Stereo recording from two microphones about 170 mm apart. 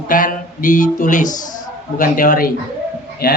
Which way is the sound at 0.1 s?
55° left (ahead or behind).